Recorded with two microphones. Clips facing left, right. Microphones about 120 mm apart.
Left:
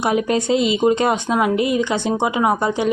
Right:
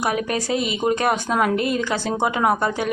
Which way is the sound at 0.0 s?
25° left (ahead or behind).